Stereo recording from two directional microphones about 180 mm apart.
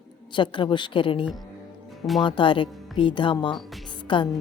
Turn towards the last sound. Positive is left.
turn(degrees=25)  # may be behind; listen again after turning